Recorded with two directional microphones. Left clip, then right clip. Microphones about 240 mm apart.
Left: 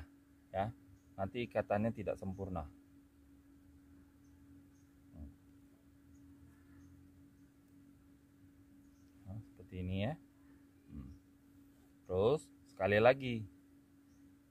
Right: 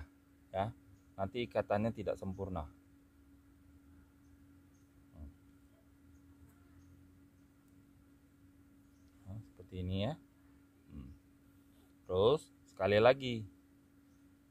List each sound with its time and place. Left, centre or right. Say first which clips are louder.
0.0 s speech: even; centre
9.7 s speech: right 2 dB; centre
12.1 s speech: right 3 dB; centre